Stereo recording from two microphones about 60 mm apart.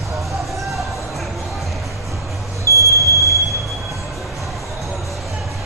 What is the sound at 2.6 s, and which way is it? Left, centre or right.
Smoke detector, right.